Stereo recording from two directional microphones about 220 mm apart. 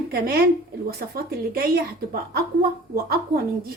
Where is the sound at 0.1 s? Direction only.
45° right (ahead or behind).